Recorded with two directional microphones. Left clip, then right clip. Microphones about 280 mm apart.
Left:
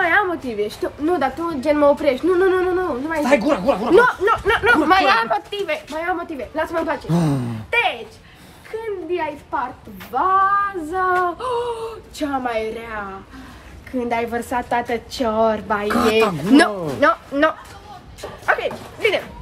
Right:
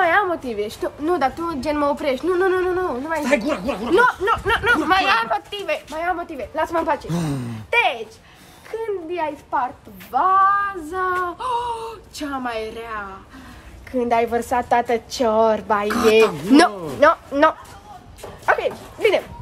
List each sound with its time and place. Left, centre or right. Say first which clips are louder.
0.0 s a woman's voice: even; right
3.2 s speech: left 5 dB; centre
4.2 s a woman's voice: left 2 dB; centre; by 7.1 s right
7.1 s speech: left 5 dB; centre
7.7 s a sound: right 1 dB; right
9.1 s a woman's voice: left 1 dB; right
10.9 s speech: left 4 dB; centre
13.9 s a woman's voice: right 3 dB; right
15.9 s speech: right 1 dB; centre
17.0 s a woman's voice: right 2 dB; right